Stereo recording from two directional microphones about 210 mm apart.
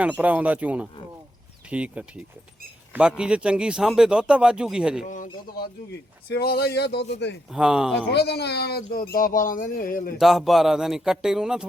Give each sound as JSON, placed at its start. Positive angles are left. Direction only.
{"t": 0.0, "sound": "speech", "side_deg": -5}
{"t": 5.0, "sound": "speech", "side_deg": 40}
{"t": 6.2, "sound": "speech", "side_deg": 50}
{"t": 7.5, "sound": "speech", "side_deg": -5}
{"t": 7.9, "sound": "speech", "side_deg": 50}
{"t": 10.2, "sound": "speech", "side_deg": 0}